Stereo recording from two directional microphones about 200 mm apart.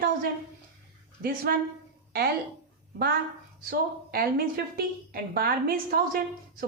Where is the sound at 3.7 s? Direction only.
50° right (ahead or behind).